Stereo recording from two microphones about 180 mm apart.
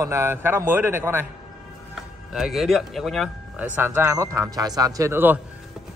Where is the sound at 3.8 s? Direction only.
10° right (ahead or behind).